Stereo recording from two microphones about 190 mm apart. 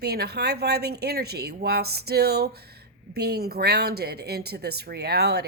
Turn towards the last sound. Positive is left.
turn(degrees=-60)  # may be behind; listen again after turning